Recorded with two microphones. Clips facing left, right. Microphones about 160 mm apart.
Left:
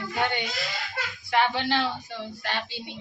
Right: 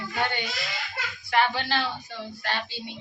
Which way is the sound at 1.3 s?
20° left (ahead or behind).